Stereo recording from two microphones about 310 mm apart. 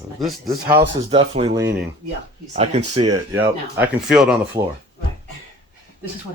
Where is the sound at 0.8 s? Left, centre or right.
Centre.